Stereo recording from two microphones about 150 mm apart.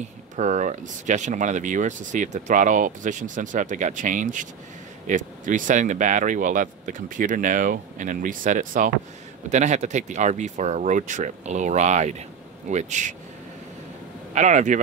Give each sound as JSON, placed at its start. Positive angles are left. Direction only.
{"t": 0.4, "sound": "speech", "side_deg": -55}
{"t": 14.3, "sound": "speech", "side_deg": -55}